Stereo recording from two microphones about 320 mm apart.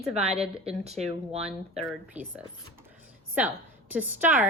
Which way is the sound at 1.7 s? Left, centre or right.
Centre.